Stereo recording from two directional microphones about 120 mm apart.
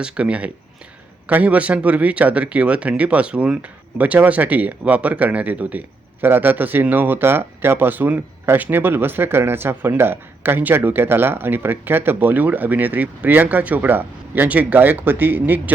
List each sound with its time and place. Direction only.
0.0 s speech: 10° right (ahead or behind)